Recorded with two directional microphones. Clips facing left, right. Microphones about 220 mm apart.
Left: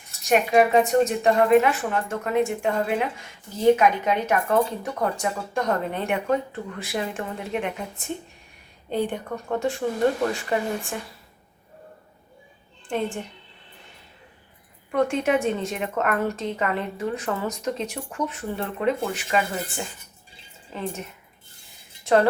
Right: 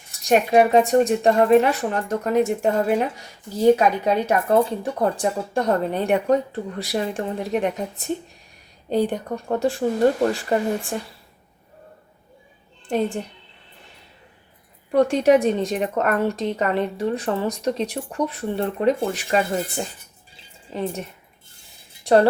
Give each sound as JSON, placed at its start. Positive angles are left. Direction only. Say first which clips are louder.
{"t": 0.3, "sound": "a woman's voice", "louder": "right 2 dB", "side_deg": -35}
{"t": 12.9, "sound": "a woman's voice", "louder": "right 4 dB", "side_deg": -35}
{"t": 14.9, "sound": "a woman's voice", "louder": "right 6 dB", "side_deg": -35}
{"t": 22.0, "sound": "speech", "louder": "right 3 dB", "side_deg": -35}